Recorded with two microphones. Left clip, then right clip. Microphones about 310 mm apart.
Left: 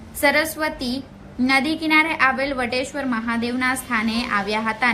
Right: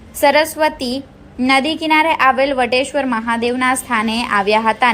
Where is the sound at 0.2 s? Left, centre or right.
Centre.